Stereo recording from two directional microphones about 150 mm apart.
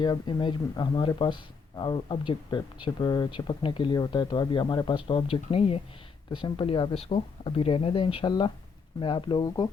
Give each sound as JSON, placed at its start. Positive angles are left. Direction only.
{"t": 0.0, "sound": "speech", "side_deg": 30}